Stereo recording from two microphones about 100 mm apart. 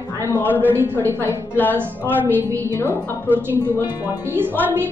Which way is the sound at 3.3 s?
20° right (ahead or behind).